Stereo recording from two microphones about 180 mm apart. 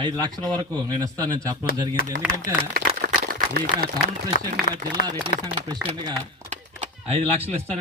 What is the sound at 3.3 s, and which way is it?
Speech, 55° right (ahead or behind).